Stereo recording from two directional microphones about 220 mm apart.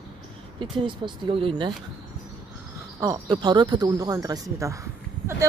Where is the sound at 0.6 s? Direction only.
20° right (ahead or behind).